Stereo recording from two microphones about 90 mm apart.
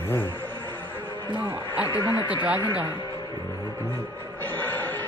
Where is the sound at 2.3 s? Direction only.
15° right (ahead or behind).